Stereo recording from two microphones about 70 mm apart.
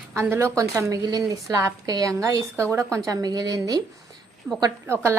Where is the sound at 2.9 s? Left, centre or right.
Right.